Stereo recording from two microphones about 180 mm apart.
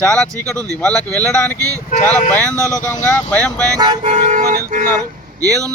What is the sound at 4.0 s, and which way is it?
Speech, 40° right (ahead or behind).